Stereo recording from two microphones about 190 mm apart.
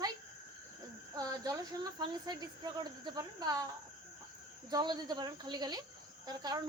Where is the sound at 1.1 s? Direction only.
20° right (ahead or behind).